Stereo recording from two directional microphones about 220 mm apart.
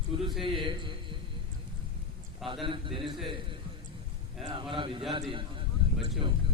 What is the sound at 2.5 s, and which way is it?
Speech, 25° right (ahead or behind).